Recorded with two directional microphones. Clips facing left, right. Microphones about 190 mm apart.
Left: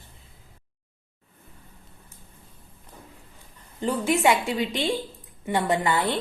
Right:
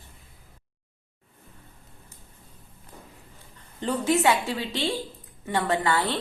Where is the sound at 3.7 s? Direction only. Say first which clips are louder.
Even; 10° left (ahead or behind).